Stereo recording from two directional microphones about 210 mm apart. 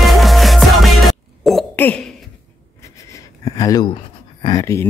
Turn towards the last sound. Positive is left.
turn(degrees=15)  # may be behind; listen again after turning